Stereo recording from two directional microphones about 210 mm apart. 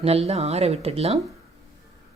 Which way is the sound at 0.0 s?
30° right (ahead or behind).